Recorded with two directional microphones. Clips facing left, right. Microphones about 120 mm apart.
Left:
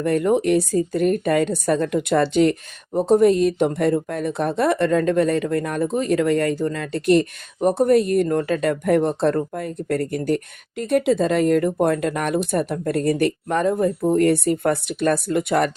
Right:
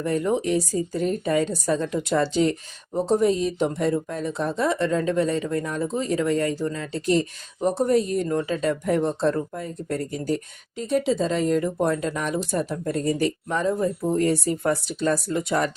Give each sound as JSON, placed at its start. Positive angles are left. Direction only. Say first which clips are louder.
{"t": 0.0, "sound": "speech", "louder": "left 5 dB", "side_deg": 65}